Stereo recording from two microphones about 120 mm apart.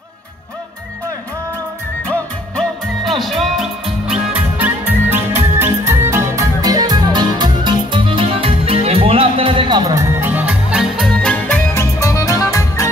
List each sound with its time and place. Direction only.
3.2 s music: centre (ahead or behind)
11.1 s music: 5° left (ahead or behind)
11.8 s music: 25° left (ahead or behind)